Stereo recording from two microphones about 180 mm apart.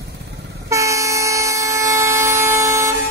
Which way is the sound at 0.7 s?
15° right (ahead or behind).